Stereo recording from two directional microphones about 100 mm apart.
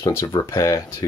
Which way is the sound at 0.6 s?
35° left (ahead or behind).